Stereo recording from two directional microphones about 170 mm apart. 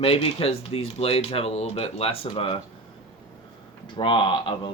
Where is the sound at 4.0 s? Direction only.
30° left (ahead or behind).